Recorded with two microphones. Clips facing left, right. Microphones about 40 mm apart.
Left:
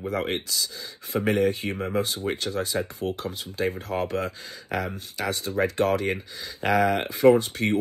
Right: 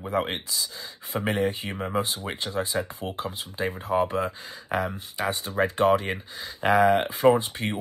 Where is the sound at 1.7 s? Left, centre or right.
Centre.